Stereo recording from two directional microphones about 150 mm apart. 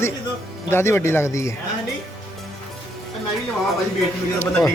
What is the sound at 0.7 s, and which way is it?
Speech, 15° left (ahead or behind).